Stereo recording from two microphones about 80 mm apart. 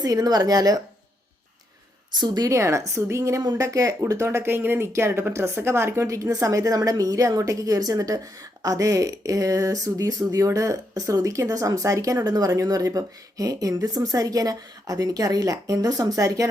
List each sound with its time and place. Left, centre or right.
0.0 s speech: right
2.1 s speech: right
2.5 s a woman's voice: right
12.2 s speech: right